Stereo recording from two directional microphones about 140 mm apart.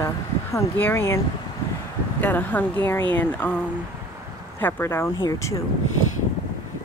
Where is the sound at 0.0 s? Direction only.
20° left (ahead or behind).